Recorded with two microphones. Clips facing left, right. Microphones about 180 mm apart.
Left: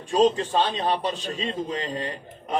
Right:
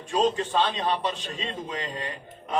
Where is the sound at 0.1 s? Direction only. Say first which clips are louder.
Left 4 dB; 35° left (ahead or behind).